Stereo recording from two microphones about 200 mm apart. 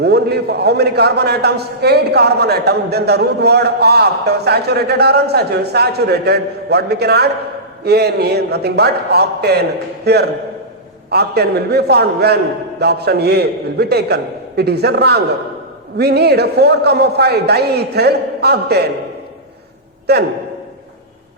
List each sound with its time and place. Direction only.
0.0 s a man's voice: 55° right (ahead or behind)
20.1 s a man's voice: 55° right (ahead or behind)